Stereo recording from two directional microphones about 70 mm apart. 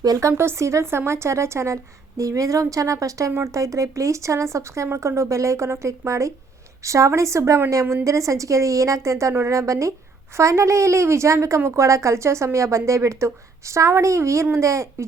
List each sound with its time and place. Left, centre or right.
0.0 s a woman's voice: right